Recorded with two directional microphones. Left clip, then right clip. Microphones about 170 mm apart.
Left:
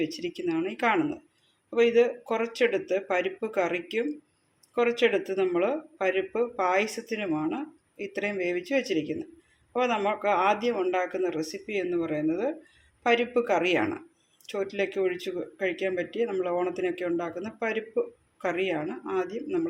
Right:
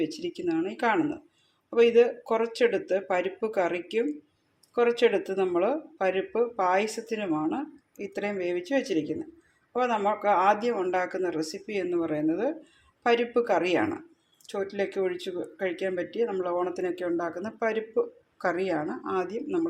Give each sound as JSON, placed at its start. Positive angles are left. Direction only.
{"t": 0.0, "sound": "speech", "side_deg": -5}